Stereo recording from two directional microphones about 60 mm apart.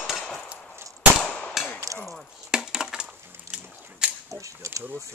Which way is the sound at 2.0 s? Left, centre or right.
Centre.